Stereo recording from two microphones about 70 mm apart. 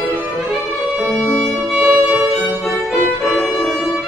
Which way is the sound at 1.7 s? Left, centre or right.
Right.